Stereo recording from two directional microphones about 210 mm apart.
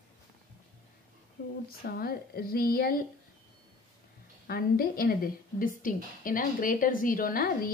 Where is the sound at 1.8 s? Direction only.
45° left (ahead or behind).